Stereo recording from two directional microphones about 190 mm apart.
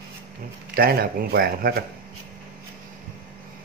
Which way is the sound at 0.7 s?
50° right (ahead or behind).